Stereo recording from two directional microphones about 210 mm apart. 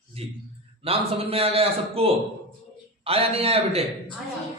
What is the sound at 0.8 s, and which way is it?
A man's voice, 25° right (ahead or behind).